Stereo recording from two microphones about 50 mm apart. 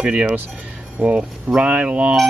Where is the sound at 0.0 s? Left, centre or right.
Right.